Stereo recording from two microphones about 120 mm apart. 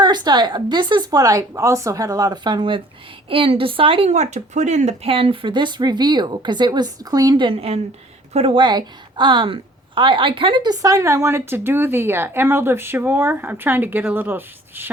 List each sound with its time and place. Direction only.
0.0 s a woman's voice: 35° right (ahead or behind)
4.1 s speech: 75° right (ahead or behind)
5.1 s speech: 45° right (ahead or behind); by 7.4 s 30° right (ahead or behind)
7.4 s speech: 55° right (ahead or behind)
8.6 s a woman's voice: 40° right (ahead or behind); by 14.8 s 15° right (ahead or behind)